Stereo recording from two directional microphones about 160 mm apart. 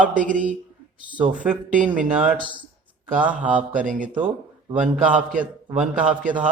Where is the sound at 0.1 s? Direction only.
55° right (ahead or behind).